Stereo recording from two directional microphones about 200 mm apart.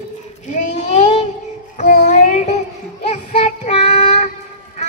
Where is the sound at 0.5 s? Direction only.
35° left (ahead or behind).